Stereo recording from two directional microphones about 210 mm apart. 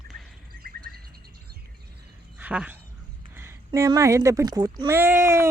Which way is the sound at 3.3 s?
10° right (ahead or behind).